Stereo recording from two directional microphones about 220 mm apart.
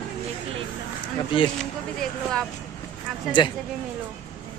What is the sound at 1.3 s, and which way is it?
Speech, 20° left (ahead or behind).